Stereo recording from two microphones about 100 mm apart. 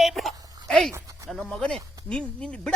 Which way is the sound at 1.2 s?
Centre (ahead or behind).